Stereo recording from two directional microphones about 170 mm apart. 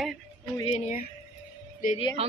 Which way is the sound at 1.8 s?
55° left (ahead or behind).